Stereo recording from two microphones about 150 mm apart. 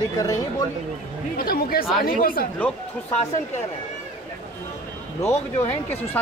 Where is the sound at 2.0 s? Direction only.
70° left (ahead or behind).